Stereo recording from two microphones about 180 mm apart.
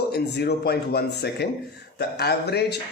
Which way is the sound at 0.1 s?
65° left (ahead or behind).